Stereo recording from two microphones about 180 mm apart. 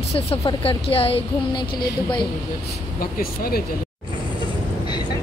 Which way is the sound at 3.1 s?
55° left (ahead or behind).